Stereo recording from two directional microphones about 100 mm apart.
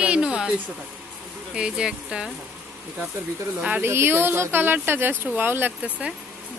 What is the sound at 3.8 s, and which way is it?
Speech, 25° right (ahead or behind).